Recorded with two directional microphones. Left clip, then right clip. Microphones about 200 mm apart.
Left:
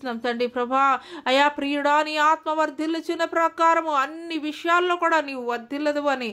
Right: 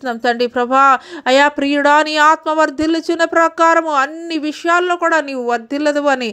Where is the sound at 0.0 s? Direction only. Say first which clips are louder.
Right 9 dB; 30° right (ahead or behind).